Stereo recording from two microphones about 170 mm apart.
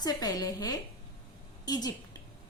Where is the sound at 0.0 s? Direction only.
20° left (ahead or behind).